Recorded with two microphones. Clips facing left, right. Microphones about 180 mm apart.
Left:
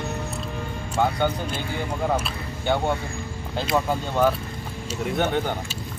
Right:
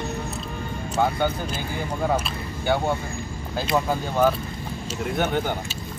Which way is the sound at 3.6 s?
Centre (ahead or behind).